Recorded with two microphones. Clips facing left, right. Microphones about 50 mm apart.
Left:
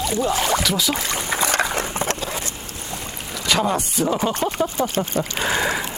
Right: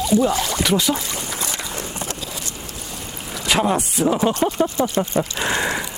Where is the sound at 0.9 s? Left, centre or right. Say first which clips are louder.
Left 3 dB; left.